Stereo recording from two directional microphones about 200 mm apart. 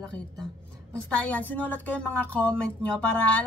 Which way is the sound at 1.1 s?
5° left (ahead or behind).